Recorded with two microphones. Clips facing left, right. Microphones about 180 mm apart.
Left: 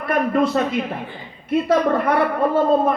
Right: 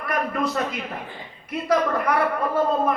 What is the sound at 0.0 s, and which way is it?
A man's voice, 25° left (ahead or behind).